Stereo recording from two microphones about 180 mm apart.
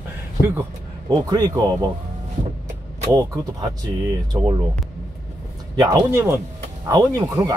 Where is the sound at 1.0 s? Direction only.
20° right (ahead or behind).